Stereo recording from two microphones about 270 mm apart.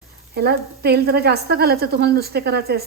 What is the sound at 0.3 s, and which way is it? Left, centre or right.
A woman's voice, right.